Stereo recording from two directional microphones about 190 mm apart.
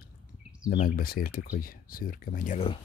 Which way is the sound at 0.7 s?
50° left (ahead or behind).